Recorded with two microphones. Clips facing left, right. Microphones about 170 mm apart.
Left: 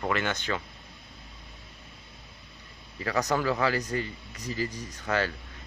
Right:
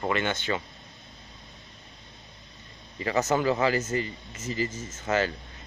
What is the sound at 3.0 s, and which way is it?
Speech, centre (ahead or behind).